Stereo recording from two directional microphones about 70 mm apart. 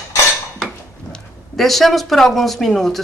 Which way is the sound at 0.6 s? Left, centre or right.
Centre.